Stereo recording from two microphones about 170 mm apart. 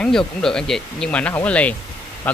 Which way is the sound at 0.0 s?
5° left (ahead or behind).